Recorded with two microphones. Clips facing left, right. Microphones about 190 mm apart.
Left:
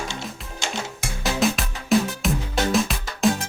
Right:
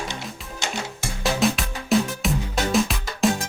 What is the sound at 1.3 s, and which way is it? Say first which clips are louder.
Music: left 1 dB; centre (ahead or behind).